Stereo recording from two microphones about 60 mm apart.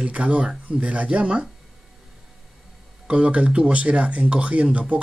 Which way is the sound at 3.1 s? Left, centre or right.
Centre.